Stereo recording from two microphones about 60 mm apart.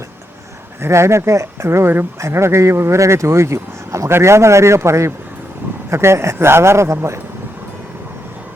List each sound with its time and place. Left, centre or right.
0.8 s a man's voice: right